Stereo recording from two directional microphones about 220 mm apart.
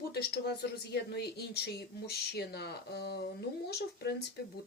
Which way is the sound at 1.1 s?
45° left (ahead or behind).